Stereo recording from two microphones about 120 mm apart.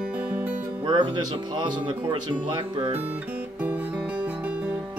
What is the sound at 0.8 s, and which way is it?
Speech, 40° right (ahead or behind).